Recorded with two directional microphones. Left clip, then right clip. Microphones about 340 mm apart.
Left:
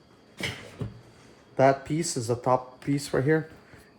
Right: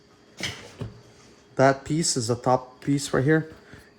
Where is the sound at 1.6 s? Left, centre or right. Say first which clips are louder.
Right 1 dB; right.